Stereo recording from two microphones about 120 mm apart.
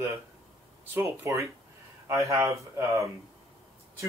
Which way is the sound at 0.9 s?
25° right (ahead or behind).